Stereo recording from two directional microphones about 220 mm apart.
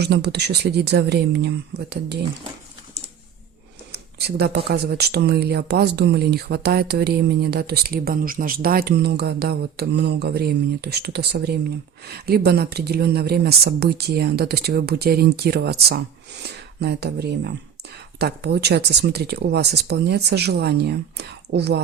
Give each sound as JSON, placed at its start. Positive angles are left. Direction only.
{"t": 0.0, "sound": "speech", "side_deg": -50}
{"t": 3.9, "sound": "speech", "side_deg": -50}